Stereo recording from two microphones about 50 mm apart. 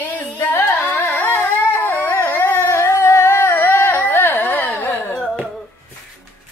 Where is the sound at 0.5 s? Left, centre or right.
Left.